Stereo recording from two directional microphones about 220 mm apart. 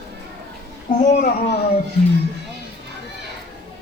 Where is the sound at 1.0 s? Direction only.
40° left (ahead or behind).